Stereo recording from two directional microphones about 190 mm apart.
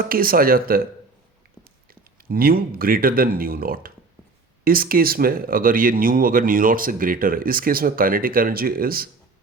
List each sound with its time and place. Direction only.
0.0 s speech: 50° right (ahead or behind)
2.3 s speech: 50° right (ahead or behind)